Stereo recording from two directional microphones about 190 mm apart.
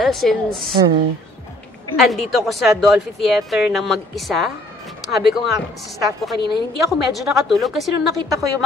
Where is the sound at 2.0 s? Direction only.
Centre (ahead or behind).